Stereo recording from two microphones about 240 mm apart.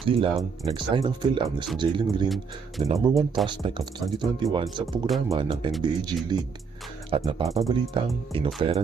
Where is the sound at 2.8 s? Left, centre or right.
Right.